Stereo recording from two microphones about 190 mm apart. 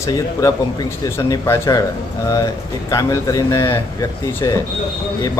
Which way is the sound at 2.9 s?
15° left (ahead or behind).